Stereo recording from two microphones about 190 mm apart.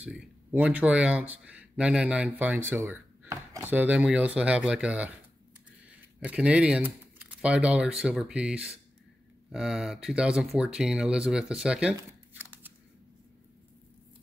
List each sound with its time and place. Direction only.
0.0 s speech: 5° right (ahead or behind)
6.2 s speech: 5° right (ahead or behind)
12.0 s a sound: 10° right (ahead or behind)